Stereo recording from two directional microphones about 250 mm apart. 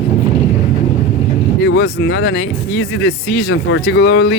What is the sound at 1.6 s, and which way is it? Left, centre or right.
Speech, left.